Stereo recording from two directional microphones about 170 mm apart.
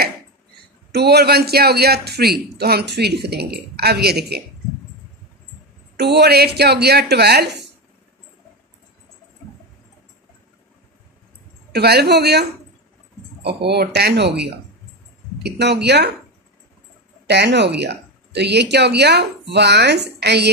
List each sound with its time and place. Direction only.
0.9 s a man's voice: 70° right (ahead or behind)
5.9 s a man's voice: 75° right (ahead or behind)
11.7 s a man's voice: 70° right (ahead or behind)
17.3 s speech: 85° right